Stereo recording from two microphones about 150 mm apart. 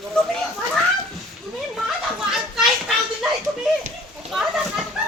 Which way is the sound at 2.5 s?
Centre (ahead or behind).